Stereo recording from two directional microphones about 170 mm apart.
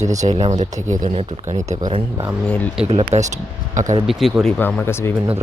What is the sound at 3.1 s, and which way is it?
Speech, 40° right (ahead or behind).